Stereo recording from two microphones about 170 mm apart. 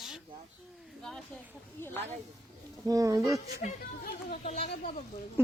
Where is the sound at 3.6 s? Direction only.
50° left (ahead or behind).